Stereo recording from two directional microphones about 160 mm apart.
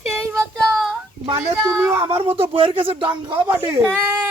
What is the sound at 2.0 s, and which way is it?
Speech, 35° right (ahead or behind).